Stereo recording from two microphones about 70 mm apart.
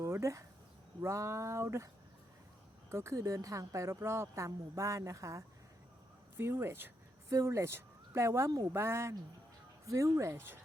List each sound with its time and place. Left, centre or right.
0.0 s a sound: right
1.0 s speech: right
2.9 s speech: right
6.3 s speech: right
7.3 s speech: right
9.8 s speech: right
10.3 s speech: right